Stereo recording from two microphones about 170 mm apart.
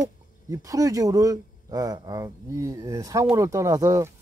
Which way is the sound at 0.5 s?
20° right (ahead or behind).